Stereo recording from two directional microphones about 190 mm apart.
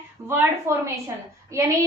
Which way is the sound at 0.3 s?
10° right (ahead or behind).